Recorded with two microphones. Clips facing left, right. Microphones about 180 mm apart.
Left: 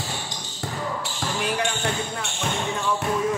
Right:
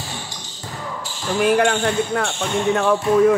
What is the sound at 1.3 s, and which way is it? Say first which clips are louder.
Speech: right 11 dB; 55° right (ahead or behind).